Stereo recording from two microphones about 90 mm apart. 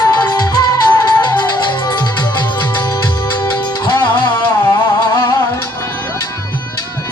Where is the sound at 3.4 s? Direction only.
60° left (ahead or behind).